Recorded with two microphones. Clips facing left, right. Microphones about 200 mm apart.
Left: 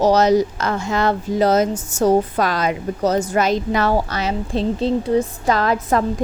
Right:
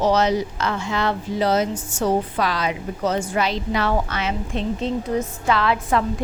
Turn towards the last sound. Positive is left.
turn(degrees=40)  # may be behind; listen again after turning